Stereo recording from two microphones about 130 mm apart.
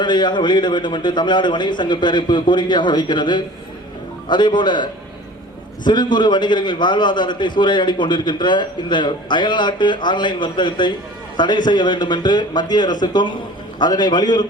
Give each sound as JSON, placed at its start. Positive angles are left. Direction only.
{"t": 0.0, "sound": "a man's voice", "side_deg": 35}